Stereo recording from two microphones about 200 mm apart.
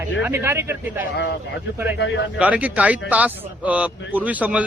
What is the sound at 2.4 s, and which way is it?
Speech, 5° right (ahead or behind).